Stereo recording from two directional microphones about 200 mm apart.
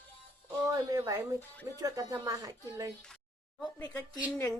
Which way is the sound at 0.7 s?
15° right (ahead or behind).